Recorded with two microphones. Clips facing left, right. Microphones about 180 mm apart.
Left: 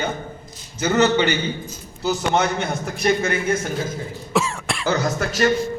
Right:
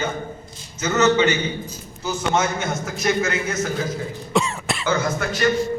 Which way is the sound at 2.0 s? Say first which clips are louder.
Left 2 dB; 35° left (ahead or behind).